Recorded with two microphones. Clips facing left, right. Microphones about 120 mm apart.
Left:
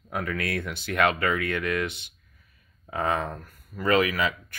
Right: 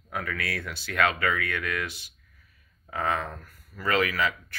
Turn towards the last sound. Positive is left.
turn(degrees=15)  # may be behind; listen again after turning